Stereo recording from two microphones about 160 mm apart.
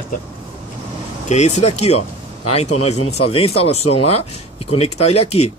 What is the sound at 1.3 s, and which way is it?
Speech, 45° left (ahead or behind).